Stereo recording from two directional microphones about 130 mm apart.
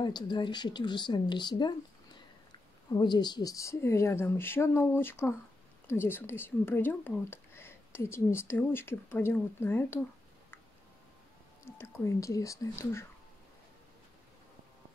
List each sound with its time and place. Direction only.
0.0 s speech: 35° left (ahead or behind)
2.9 s a woman's voice: 35° left (ahead or behind); by 9.9 s 15° left (ahead or behind)
11.6 s a woman's voice: 20° left (ahead or behind)